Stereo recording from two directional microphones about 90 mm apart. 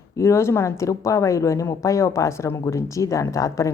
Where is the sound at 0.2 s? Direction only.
30° left (ahead or behind).